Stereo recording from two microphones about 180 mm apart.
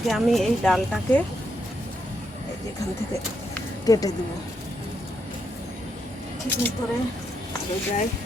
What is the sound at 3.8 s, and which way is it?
Speech, 20° left (ahead or behind).